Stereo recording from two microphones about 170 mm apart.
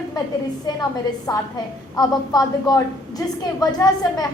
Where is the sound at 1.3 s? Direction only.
20° left (ahead or behind).